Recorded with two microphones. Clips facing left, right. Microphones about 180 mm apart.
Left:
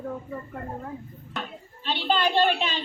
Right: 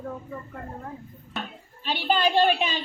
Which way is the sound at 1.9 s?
15° right (ahead or behind).